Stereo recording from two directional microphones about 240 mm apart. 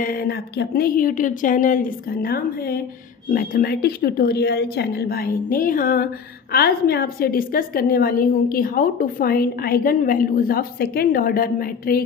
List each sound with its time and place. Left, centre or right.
0.0 s a woman's voice: left